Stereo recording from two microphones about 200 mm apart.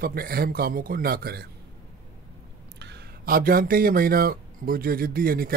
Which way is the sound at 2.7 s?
55° right (ahead or behind).